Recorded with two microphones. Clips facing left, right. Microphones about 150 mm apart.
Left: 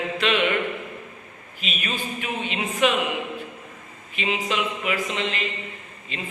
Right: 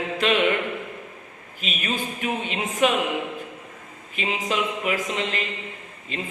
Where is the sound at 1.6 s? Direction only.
45° right (ahead or behind).